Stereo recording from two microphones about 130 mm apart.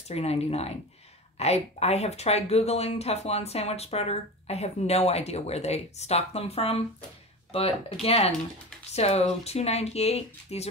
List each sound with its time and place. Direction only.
0.1 s speech: 55° left (ahead or behind)